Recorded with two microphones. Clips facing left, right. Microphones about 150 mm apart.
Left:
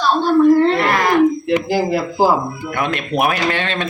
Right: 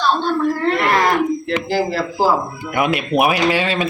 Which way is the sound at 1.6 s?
15° left (ahead or behind).